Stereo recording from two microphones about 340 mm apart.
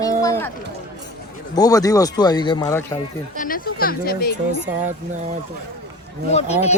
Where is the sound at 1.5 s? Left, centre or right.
Centre.